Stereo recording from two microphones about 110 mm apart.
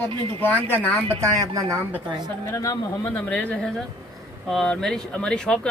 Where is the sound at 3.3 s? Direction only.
10° left (ahead or behind).